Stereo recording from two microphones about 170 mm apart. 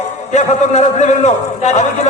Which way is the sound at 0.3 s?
45° left (ahead or behind).